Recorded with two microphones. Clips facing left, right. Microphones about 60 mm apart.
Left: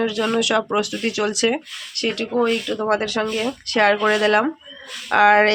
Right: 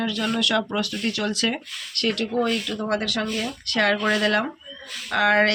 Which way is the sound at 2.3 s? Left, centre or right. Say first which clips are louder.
Left 4 dB; left.